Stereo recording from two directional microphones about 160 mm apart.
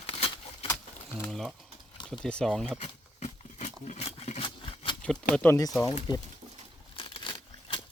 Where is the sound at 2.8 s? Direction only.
45° left (ahead or behind).